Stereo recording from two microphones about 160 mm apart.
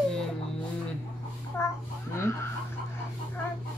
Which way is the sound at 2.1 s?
15° left (ahead or behind).